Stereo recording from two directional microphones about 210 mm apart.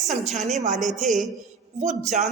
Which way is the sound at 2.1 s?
35° right (ahead or behind).